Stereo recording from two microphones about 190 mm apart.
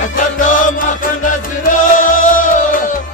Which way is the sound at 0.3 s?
45° left (ahead or behind).